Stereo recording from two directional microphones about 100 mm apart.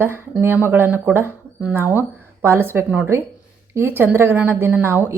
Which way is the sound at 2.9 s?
10° right (ahead or behind).